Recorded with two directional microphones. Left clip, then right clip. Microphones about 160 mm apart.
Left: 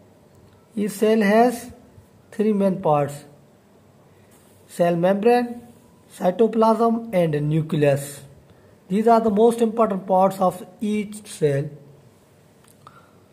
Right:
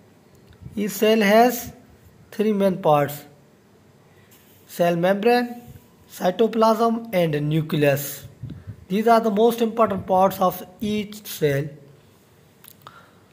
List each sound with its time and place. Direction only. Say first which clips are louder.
0.7 s speech: right 1 dB; 5° left (ahead or behind)
4.6 s a man's voice: even; 10° left (ahead or behind)